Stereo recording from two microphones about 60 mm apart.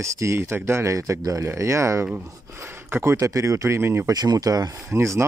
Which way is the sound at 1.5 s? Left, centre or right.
Right.